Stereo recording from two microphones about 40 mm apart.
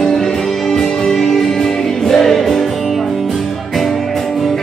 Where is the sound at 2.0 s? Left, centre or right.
Centre.